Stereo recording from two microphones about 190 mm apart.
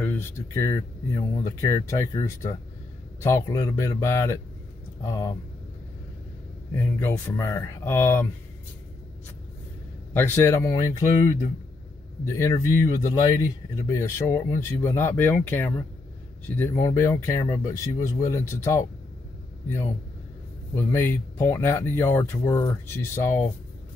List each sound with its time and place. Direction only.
0.0 s speech: 10° left (ahead or behind)
6.7 s speech: 10° left (ahead or behind)
10.1 s speech: 10° left (ahead or behind)
20.7 s speech: 10° left (ahead or behind)